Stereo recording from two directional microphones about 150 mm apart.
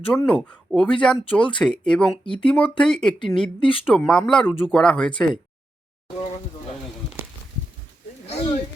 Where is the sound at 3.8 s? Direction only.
5° left (ahead or behind).